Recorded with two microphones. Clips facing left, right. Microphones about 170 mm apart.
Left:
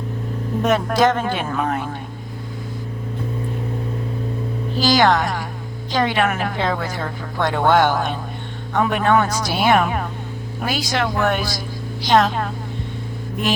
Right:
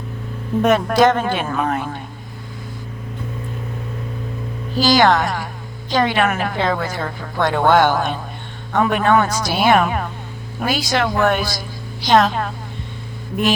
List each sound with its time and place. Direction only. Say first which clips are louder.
0.6 s speech: right 3 dB; 65° right (ahead or behind)
4.9 s a woman's voice: right 2 dB; 80° right